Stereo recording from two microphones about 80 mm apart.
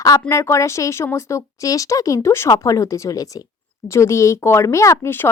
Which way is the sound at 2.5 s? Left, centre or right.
Left.